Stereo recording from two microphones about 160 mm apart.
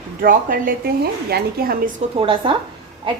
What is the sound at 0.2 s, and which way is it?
A woman's voice, 60° right (ahead or behind).